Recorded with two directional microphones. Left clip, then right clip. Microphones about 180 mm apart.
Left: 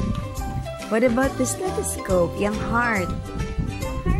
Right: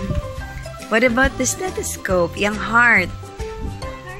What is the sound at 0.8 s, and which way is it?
Speech, centre (ahead or behind).